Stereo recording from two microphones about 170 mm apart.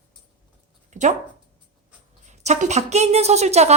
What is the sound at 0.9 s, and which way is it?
Speech, 45° right (ahead or behind).